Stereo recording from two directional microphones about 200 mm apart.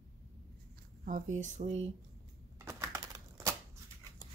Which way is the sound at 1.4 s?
35° right (ahead or behind).